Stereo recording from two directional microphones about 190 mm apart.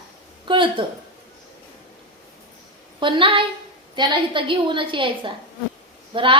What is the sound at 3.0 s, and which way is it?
A woman's voice, 25° right (ahead or behind).